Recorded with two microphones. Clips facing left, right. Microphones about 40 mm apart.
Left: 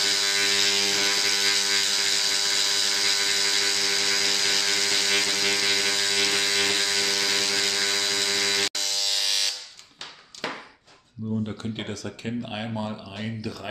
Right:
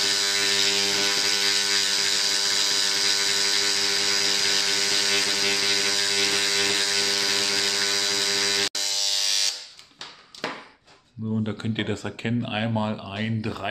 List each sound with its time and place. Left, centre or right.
0.0 s electric shaver: centre
11.4 s speech: right